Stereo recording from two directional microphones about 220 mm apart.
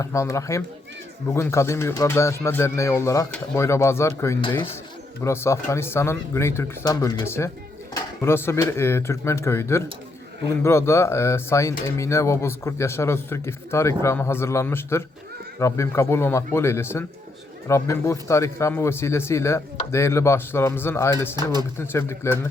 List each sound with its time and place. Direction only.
0.0 s speech: 15° left (ahead or behind)
21.3 s speech: 20° right (ahead or behind)
21.8 s speech: 10° left (ahead or behind)